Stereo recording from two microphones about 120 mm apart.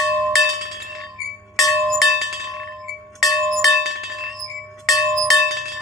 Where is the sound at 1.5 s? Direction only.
Centre (ahead or behind).